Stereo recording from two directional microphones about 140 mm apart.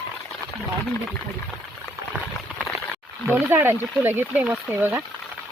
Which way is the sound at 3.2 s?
15° right (ahead or behind).